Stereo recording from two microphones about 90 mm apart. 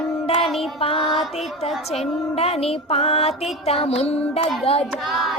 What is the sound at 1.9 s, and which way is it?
Music, 90° left.